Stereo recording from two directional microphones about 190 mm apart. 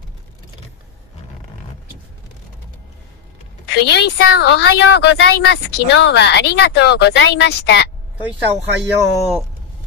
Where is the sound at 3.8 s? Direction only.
60° left (ahead or behind).